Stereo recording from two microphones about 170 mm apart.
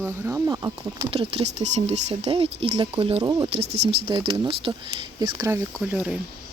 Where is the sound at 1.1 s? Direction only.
35° right (ahead or behind).